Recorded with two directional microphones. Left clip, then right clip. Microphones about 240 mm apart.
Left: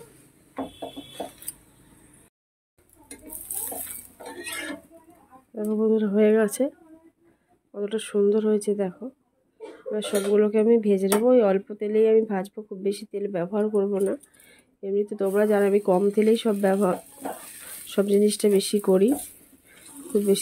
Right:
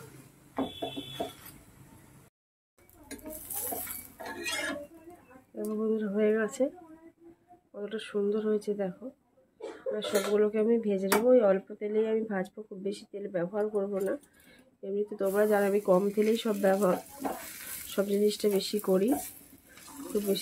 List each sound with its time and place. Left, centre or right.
5.6 s speech: left
7.7 s speech: left
9.9 s speech: left